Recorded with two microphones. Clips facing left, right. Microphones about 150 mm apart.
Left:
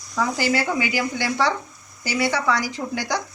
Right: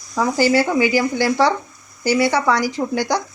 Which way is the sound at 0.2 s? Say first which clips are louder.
Right 6 dB; 30° right (ahead or behind).